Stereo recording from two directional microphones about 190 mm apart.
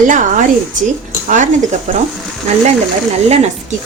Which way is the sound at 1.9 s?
40° right (ahead or behind).